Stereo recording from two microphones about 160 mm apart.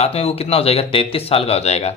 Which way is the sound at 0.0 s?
40° left (ahead or behind).